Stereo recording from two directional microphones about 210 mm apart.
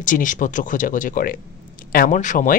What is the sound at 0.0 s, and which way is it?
Speech, 40° left (ahead or behind).